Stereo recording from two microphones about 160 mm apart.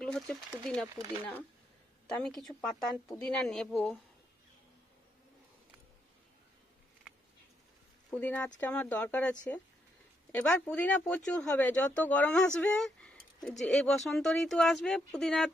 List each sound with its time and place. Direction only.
0.0 s speech: 5° left (ahead or behind)
2.2 s speech: 5° left (ahead or behind)
8.1 s speech: 10° left (ahead or behind)